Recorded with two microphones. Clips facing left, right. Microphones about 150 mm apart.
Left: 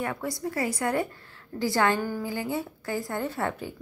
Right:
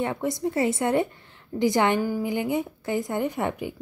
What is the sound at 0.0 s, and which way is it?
A woman's voice, 20° right (ahead or behind).